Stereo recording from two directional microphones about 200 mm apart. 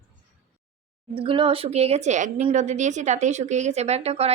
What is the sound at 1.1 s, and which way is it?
Speech, 25° right (ahead or behind).